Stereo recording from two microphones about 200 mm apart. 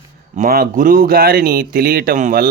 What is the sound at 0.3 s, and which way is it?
Speech, 45° right (ahead or behind).